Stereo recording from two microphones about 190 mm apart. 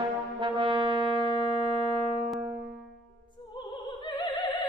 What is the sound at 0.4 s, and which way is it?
Music, 25° right (ahead or behind).